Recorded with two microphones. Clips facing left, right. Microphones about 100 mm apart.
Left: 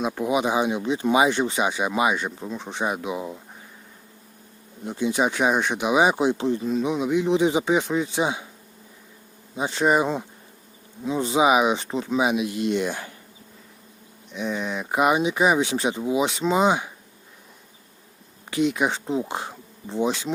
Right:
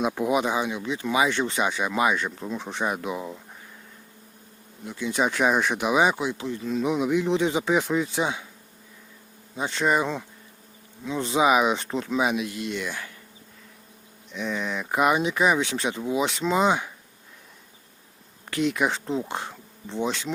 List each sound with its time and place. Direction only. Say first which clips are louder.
0.0 s speech: even; centre (ahead or behind)
0.5 s speech: left 4 dB; 20° left (ahead or behind)
1.5 s speech: left 2 dB; 10° left (ahead or behind)
4.9 s speech: left 5 dB; 20° left (ahead or behind)
5.1 s speech: even; 5° left (ahead or behind)
6.1 s speech: left 7 dB; 30° left (ahead or behind)
6.8 s speech: right 1 dB; centre (ahead or behind)
8.2 s speech: left 2 dB; 15° left (ahead or behind)
9.6 s speech: left 3 dB; 10° left (ahead or behind)
12.5 s speech: left 7 dB; 25° left (ahead or behind)
14.3 s speech: left 2 dB; 5° left (ahead or behind)
18.5 s speech: left 2 dB; 5° left (ahead or behind)